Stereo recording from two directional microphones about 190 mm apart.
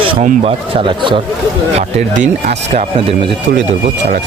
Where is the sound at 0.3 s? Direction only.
30° right (ahead or behind).